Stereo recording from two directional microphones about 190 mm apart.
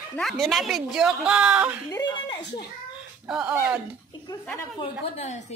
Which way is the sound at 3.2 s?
5° right (ahead or behind).